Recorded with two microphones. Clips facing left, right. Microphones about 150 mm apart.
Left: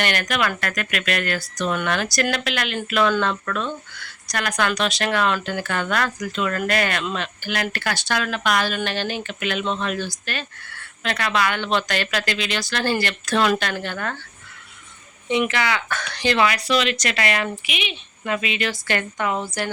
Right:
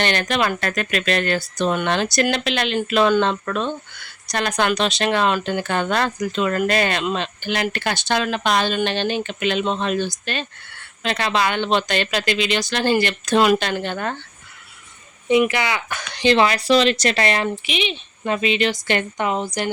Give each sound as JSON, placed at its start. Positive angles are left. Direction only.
{"t": 0.0, "sound": "speech", "side_deg": -25}
{"t": 15.3, "sound": "speech", "side_deg": -15}